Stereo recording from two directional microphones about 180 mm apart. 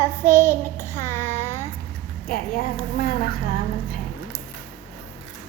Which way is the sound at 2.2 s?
60° left (ahead or behind).